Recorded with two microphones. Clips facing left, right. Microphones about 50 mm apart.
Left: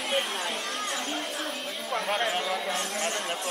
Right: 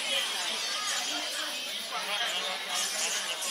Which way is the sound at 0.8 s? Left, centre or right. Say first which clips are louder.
Left 3 dB; centre.